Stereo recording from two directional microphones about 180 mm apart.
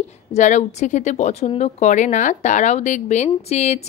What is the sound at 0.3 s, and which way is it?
A woman's voice, 40° left (ahead or behind).